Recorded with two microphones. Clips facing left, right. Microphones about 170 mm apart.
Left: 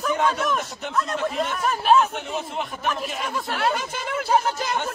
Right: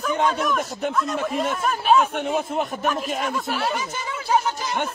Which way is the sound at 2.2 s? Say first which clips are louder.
Right 5 dB; 50° right (ahead or behind).